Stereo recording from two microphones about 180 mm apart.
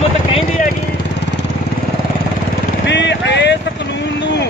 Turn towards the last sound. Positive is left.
turn(degrees=75)  # may be behind; listen again after turning